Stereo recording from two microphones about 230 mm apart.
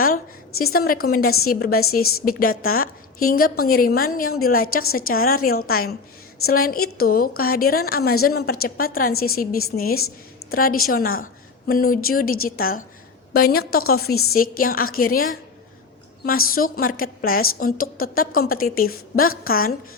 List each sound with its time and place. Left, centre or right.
0.7 s a woman's voice: left
16.6 s a woman's voice: left